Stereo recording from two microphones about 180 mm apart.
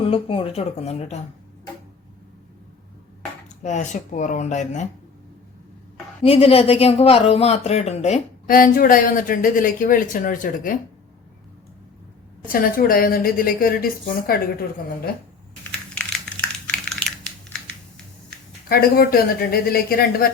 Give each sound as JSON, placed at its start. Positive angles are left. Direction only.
{"t": 0.0, "sound": "speech", "side_deg": 30}
{"t": 3.6, "sound": "speech", "side_deg": 40}
{"t": 6.2, "sound": "speech", "side_deg": 35}
{"t": 8.5, "sound": "speech", "side_deg": 50}
{"t": 12.5, "sound": "speech", "side_deg": 55}
{"t": 16.3, "sound": "a sound", "side_deg": 5}
{"t": 16.6, "sound": "typing", "side_deg": 5}
{"t": 18.7, "sound": "speech", "side_deg": 60}